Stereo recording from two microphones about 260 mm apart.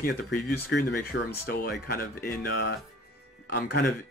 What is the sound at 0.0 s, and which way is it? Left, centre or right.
Speech, left.